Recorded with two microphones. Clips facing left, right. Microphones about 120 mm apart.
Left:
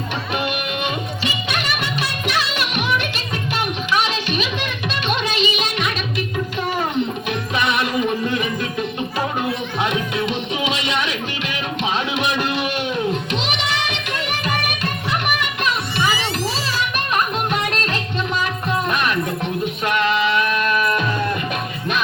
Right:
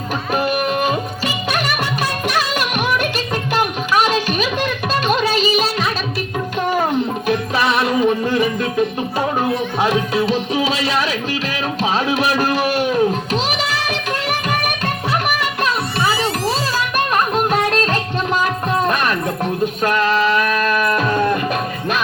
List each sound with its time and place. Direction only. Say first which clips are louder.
0.3 s music: right 7 dB; 40° right (ahead or behind)
7.3 s music: right 4 dB; 35° right (ahead or behind)
9.8 s music: right 4 dB; 35° right (ahead or behind)
15.3 s a sound: right 3 dB; 40° right (ahead or behind)
18.4 s music: right 4 dB; 40° right (ahead or behind)